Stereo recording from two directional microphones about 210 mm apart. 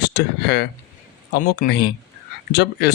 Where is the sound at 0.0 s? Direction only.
50° left (ahead or behind).